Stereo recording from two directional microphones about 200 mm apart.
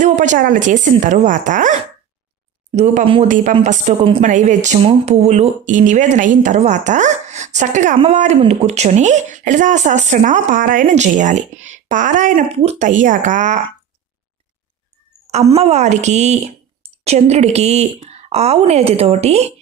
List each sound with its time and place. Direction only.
0.0 s speech: 40° right (ahead or behind)
2.7 s speech: 35° right (ahead or behind)
15.5 s speech: 30° right (ahead or behind)